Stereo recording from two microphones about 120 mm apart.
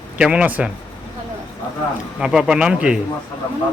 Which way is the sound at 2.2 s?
5° right (ahead or behind).